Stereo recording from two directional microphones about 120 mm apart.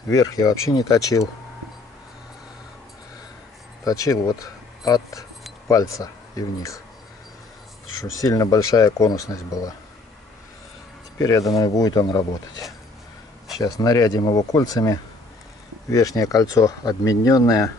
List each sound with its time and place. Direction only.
0.1 s speech: 30° left (ahead or behind)
3.8 s speech: 30° left (ahead or behind)
8.0 s speech: 30° left (ahead or behind)
11.1 s speech: 30° left (ahead or behind)